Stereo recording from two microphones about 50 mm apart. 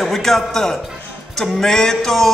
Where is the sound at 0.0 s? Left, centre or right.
Centre.